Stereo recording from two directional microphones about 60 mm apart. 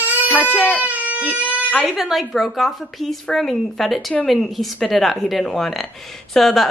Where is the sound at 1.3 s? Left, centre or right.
Right.